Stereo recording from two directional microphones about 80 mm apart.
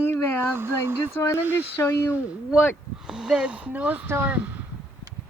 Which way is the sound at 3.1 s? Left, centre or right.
Centre.